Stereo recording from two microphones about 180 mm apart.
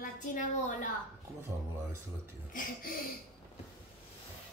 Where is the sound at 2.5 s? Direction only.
50° left (ahead or behind).